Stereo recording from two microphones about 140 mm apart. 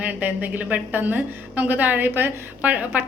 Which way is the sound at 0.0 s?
10° right (ahead or behind).